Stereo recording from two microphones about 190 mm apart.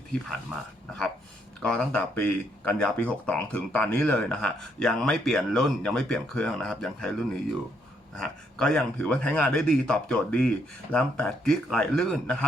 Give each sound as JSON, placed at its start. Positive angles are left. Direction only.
{"t": 1.6, "sound": "speech", "side_deg": 5}